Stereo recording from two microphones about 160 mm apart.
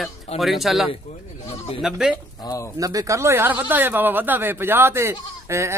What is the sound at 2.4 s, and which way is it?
Speech, 20° left (ahead or behind).